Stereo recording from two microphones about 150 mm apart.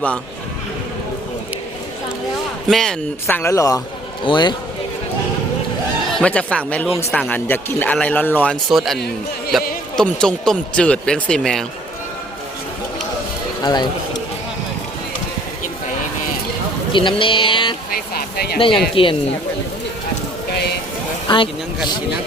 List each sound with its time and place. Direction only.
2.6 s speech: centre (ahead or behind)
3.2 s speech: 15° left (ahead or behind)
6.1 s a man's voice: 5° left (ahead or behind)
13.6 s speech: 30° left (ahead or behind)
16.9 s speech: 30° left (ahead or behind)
18.1 s a sound: 90° left
19.0 s speech: 35° left (ahead or behind)
21.2 s speech: 35° left (ahead or behind)